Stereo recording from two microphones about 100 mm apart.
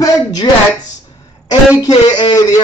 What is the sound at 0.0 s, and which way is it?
Speech, 40° left (ahead or behind).